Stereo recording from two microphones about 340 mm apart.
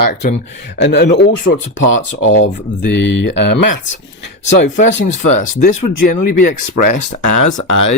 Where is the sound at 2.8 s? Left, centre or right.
Left.